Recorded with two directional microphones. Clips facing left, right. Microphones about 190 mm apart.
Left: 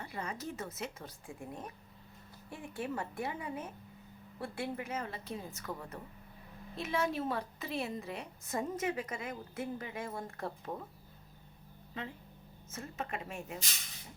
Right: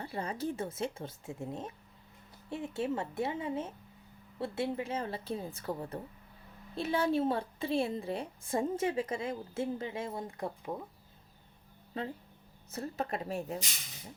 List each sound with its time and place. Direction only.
0.0 s a woman's voice: 30° right (ahead or behind); by 10.5 s 15° right (ahead or behind)
11.9 s a woman's voice: 35° right (ahead or behind)